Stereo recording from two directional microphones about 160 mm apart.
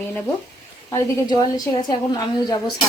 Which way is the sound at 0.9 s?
25° left (ahead or behind).